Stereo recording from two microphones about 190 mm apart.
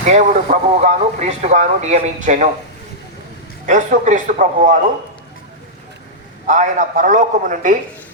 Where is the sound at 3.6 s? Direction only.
40° right (ahead or behind).